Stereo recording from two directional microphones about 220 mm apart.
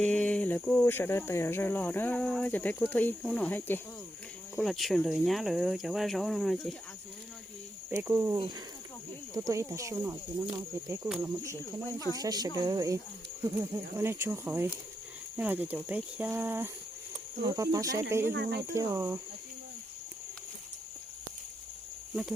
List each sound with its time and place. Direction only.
0.0 s speech: 5° left (ahead or behind)
7.9 s speech: 10° right (ahead or behind)
11.9 s speech: 15° left (ahead or behind)
12.2 s speech: 15° right (ahead or behind)
18.3 s speech: 50° right (ahead or behind)
18.7 s speech: 10° right (ahead or behind)